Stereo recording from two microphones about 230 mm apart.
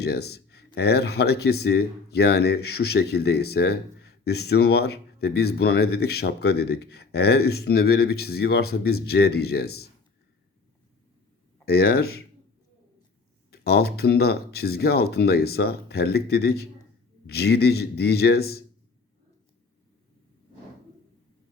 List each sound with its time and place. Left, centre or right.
0.0 s speech: left
11.6 s speech: left
13.5 s speech: left